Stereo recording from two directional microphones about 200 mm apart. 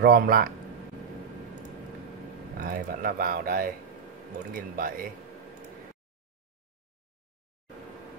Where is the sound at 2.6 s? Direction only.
45° right (ahead or behind).